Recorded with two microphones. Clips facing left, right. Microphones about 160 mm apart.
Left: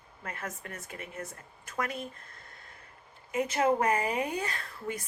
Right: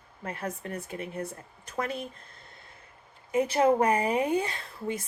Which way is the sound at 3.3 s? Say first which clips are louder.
Right 4 dB; 30° right (ahead or behind).